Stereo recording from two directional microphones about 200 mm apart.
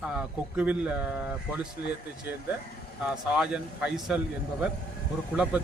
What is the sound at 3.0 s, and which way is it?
Speech, 5° right (ahead or behind).